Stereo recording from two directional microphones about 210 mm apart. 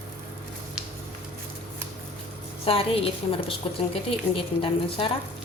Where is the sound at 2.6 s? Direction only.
25° left (ahead or behind).